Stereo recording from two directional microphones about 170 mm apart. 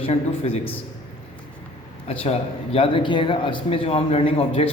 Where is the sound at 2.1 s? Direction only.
35° left (ahead or behind).